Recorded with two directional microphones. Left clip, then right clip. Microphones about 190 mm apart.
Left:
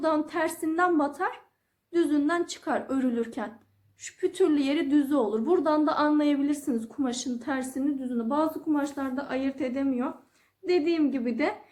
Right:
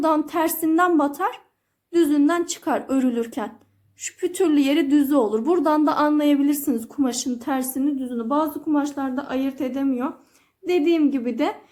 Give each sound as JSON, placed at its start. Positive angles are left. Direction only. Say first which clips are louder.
{"t": 0.0, "sound": "a woman's voice", "louder": "right 6 dB", "side_deg": -50}